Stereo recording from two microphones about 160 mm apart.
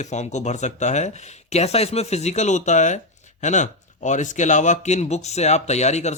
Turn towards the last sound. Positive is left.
turn(degrees=45)  # may be behind; listen again after turning